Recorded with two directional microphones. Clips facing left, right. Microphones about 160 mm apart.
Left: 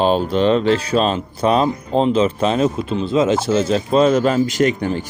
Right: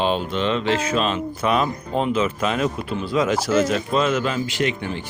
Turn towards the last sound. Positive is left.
turn(degrees=40)  # may be behind; listen again after turning